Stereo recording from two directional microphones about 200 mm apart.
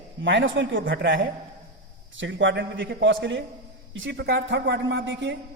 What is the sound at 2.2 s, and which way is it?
A man's voice, 70° right (ahead or behind).